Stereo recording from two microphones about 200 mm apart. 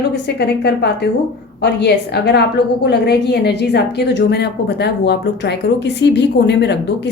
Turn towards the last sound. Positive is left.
turn(degrees=60)  # may be behind; listen again after turning